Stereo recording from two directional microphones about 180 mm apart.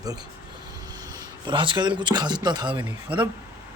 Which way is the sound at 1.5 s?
25° right (ahead or behind).